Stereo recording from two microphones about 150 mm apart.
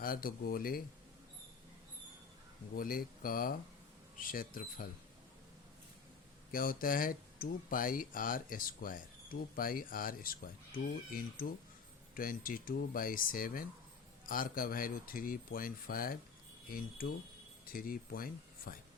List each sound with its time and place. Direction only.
0.0 s speech: 75° left (ahead or behind)
2.7 s speech: 75° left (ahead or behind)
6.5 s speech: 70° left (ahead or behind)
12.1 s speech: 70° left (ahead or behind)